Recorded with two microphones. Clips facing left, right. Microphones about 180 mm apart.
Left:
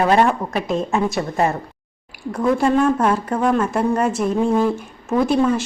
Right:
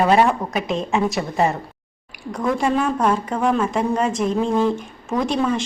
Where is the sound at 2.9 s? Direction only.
5° left (ahead or behind).